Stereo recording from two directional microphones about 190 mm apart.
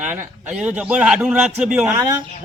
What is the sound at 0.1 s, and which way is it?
A man's voice, 5° right (ahead or behind).